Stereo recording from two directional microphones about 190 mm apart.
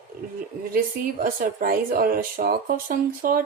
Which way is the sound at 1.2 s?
50° right (ahead or behind).